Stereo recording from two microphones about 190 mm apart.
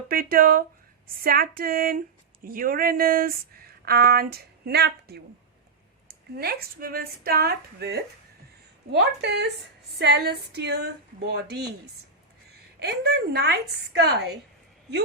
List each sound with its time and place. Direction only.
0.1 s a sound: 50° right (ahead or behind)
2.4 s speech: 50° right (ahead or behind)
6.3 s a woman's voice: 55° right (ahead or behind)
12.8 s a woman's voice: 55° right (ahead or behind)